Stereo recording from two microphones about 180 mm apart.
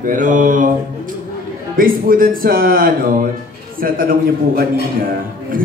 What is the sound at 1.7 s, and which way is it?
A man's voice, 50° right (ahead or behind).